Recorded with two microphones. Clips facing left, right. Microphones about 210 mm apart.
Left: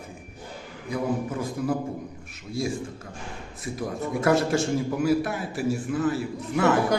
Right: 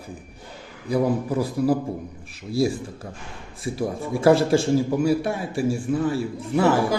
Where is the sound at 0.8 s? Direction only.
35° right (ahead or behind).